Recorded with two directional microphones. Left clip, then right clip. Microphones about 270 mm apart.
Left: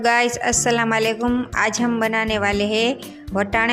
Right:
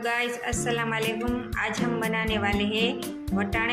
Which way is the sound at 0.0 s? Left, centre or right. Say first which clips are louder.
Left 10 dB; left.